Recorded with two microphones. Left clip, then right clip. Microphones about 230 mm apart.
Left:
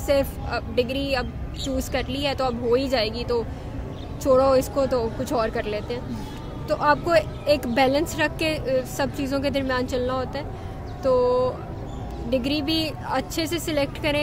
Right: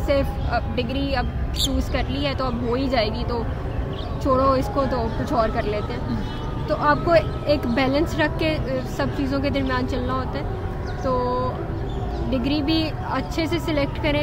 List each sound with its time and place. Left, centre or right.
0.1 s speech: left